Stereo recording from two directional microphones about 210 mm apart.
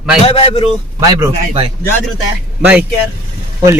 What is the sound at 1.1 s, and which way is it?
Speech, 10° right (ahead or behind).